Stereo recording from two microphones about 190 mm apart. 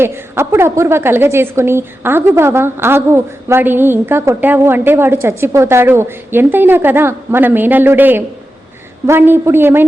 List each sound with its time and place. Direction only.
0.0 s a woman's voice: 15° right (ahead or behind)